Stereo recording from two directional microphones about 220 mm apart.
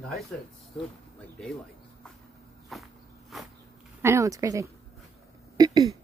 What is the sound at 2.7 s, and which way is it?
Walk, centre (ahead or behind).